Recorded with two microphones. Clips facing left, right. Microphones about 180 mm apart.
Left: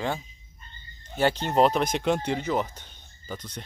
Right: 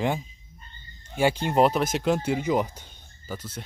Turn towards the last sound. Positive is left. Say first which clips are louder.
# right 1 dB
turn(degrees=-5)  # may be behind; listen again after turning